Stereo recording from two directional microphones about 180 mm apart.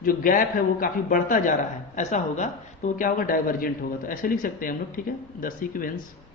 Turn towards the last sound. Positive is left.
turn(degrees=50)  # may be behind; listen again after turning